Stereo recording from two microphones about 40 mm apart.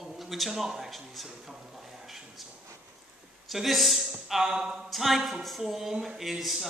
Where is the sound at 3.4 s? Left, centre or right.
Centre.